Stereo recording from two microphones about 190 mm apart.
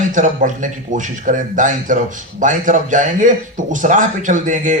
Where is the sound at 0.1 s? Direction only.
40° right (ahead or behind).